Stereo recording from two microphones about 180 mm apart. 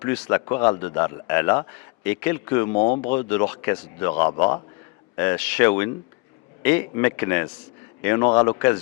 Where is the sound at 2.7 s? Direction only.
35° left (ahead or behind).